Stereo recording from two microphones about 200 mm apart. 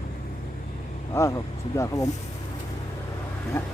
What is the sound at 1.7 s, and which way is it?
Speech, 15° left (ahead or behind).